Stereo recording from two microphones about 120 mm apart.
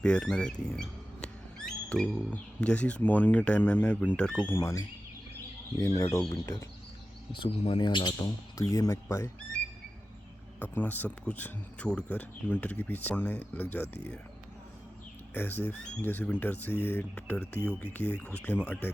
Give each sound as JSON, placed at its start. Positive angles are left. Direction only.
{"t": 0.0, "sound": "speech", "side_deg": 5}
{"t": 4.5, "sound": "speech", "side_deg": 25}
{"t": 6.0, "sound": "speech", "side_deg": 25}
{"t": 7.3, "sound": "speech", "side_deg": 50}
{"t": 8.5, "sound": "speech", "side_deg": 30}
{"t": 10.6, "sound": "speech", "side_deg": 15}
{"t": 15.3, "sound": "speech", "side_deg": 15}